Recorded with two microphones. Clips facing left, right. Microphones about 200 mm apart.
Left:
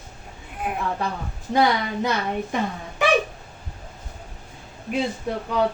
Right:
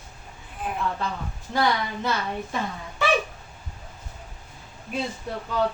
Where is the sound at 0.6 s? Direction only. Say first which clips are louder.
Left 2 dB; 10° left (ahead or behind).